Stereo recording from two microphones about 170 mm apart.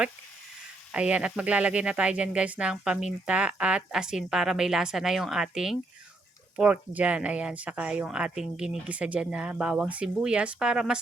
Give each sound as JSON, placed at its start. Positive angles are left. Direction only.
{"t": 0.9, "sound": "speech", "side_deg": -5}